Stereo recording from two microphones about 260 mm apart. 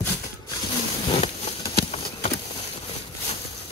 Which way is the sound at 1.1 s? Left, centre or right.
Left.